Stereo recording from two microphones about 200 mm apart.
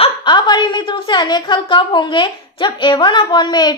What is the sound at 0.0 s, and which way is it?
A woman's voice, 20° left (ahead or behind).